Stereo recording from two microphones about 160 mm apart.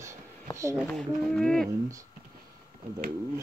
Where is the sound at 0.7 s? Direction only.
Centre (ahead or behind).